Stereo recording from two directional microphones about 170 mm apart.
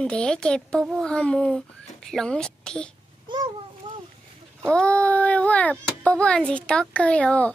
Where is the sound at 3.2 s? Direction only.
25° right (ahead or behind).